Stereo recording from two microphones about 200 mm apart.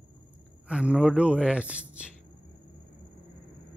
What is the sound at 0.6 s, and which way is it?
Speech, 5° right (ahead or behind).